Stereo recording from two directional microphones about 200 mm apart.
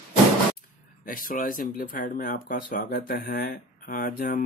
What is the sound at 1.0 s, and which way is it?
Speech, 45° left (ahead or behind).